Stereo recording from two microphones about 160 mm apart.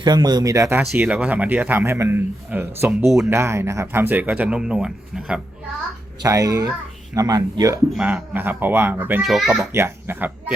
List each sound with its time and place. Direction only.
0.0 s speech: 25° right (ahead or behind)
0.8 s speech: 10° right (ahead or behind)
6.2 s speech: 20° right (ahead or behind)
7.9 s speech: 10° right (ahead or behind)
9.2 s a child's voice: centre (ahead or behind)
9.7 s speech: 15° right (ahead or behind)